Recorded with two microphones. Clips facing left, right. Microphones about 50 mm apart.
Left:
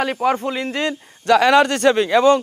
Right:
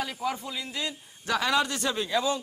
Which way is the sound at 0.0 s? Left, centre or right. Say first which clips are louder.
Left 12 dB; left.